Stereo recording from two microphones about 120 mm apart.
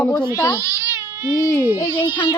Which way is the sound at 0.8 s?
20° right (ahead or behind).